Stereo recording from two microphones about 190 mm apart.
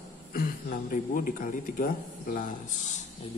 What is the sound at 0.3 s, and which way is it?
Speech, 50° left (ahead or behind).